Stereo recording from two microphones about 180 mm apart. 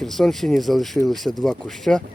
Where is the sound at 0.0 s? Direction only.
Centre (ahead or behind).